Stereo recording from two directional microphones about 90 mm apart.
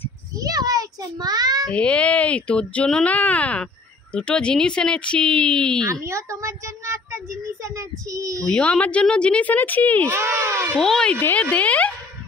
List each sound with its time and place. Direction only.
0.4 s a sound: 45° right (ahead or behind)
1.7 s speech: 10° left (ahead or behind)
5.9 s a child's voice: 35° right (ahead or behind)
8.5 s speech: 10° left (ahead or behind)
10.1 s speech: 30° right (ahead or behind)
10.8 s speech: 5° left (ahead or behind)
11.1 s speech: 20° left (ahead or behind)